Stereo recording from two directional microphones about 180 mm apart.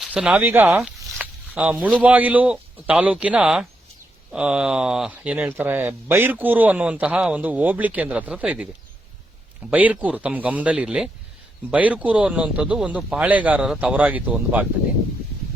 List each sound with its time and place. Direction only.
0.0 s a man's voice: 5° right (ahead or behind)